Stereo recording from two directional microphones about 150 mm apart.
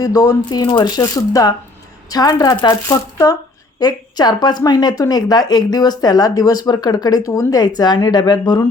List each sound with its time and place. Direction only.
0.0 s speech: 25° left (ahead or behind)